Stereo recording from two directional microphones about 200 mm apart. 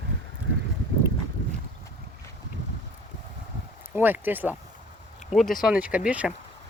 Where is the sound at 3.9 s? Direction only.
10° right (ahead or behind).